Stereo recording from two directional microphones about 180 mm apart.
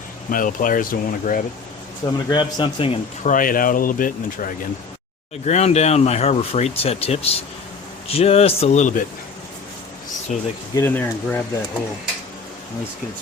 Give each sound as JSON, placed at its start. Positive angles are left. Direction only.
{"t": 0.3, "sound": "speech", "side_deg": 50}
{"t": 2.3, "sound": "a man's voice", "side_deg": 25}
{"t": 3.2, "sound": "speech", "side_deg": 50}
{"t": 5.5, "sound": "speech", "side_deg": 35}
{"t": 10.3, "sound": "speech", "side_deg": 40}
{"t": 10.8, "sound": "speech", "side_deg": 15}